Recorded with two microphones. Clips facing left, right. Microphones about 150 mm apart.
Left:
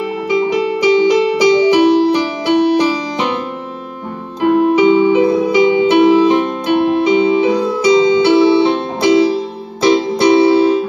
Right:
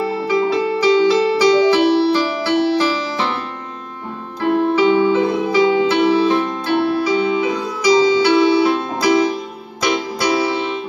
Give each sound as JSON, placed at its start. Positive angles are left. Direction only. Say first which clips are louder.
{"t": 0.0, "sound": "music", "louder": "left 2 dB", "side_deg": 20}
{"t": 4.4, "sound": "music", "louder": "left 4 dB", "side_deg": 15}